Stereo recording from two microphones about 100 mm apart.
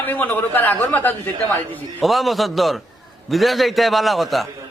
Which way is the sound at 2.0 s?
Centre (ahead or behind).